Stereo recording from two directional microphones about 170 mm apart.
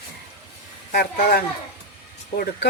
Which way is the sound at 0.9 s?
65° left (ahead or behind).